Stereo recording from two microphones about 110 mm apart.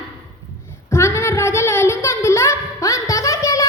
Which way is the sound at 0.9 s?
25° left (ahead or behind).